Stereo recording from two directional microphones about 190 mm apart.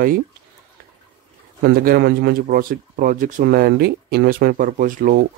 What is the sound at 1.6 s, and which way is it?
Speech, 50° right (ahead or behind).